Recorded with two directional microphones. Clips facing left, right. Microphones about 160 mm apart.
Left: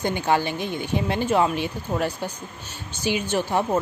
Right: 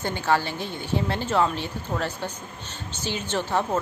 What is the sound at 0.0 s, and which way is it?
A woman's voice, 15° left (ahead or behind).